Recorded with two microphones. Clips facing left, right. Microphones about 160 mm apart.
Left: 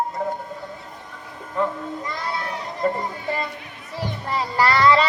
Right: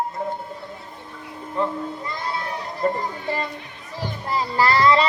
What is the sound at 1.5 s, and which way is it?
Child singing, 25° right (ahead or behind).